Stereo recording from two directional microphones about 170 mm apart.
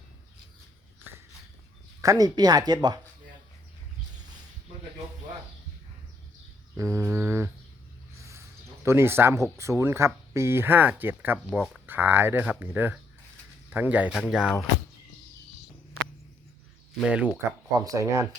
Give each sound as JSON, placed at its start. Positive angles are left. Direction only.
{"t": 2.0, "sound": "speech", "side_deg": -20}
{"t": 6.7, "sound": "speech", "side_deg": -15}
{"t": 17.0, "sound": "speech", "side_deg": -5}
{"t": 17.7, "sound": "speech", "side_deg": -20}